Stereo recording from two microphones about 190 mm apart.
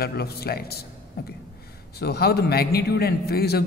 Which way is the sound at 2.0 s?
55° left (ahead or behind).